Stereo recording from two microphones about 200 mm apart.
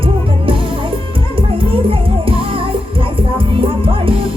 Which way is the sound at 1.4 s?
25° right (ahead or behind).